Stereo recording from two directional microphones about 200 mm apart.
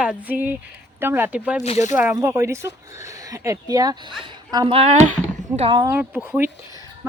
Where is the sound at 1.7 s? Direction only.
35° left (ahead or behind).